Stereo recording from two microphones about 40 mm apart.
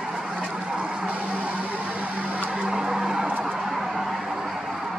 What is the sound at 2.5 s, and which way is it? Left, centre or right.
Vehicle, centre.